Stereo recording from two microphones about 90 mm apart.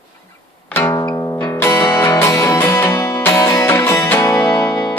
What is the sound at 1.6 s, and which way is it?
Music, 25° left (ahead or behind).